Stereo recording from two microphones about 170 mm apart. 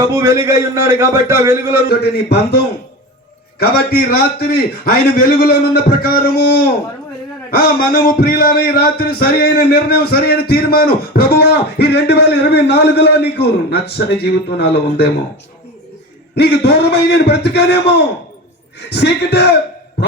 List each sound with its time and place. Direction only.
0.0 s a man's voice: 20° right (ahead or behind)
1.9 s a man's voice: 75° left (ahead or behind)
3.6 s speech: 65° left (ahead or behind)
7.5 s a man's voice: 60° left (ahead or behind)
16.3 s a man's voice: 75° left (ahead or behind)
18.9 s speech: 80° left